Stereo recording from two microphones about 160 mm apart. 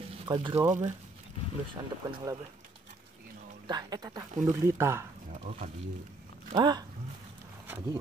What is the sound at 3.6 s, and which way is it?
Speech, 25° right (ahead or behind).